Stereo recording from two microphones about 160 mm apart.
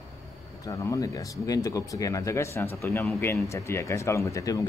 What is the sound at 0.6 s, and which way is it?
Speech, 20° left (ahead or behind).